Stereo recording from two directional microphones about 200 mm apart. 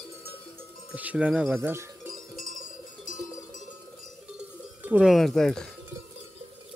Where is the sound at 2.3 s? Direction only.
45° left (ahead or behind).